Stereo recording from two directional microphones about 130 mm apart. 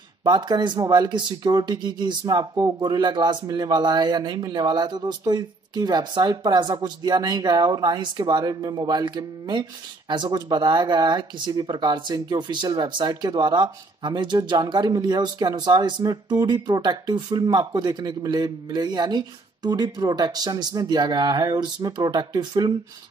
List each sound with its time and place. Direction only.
0.2 s speech: 35° right (ahead or behind)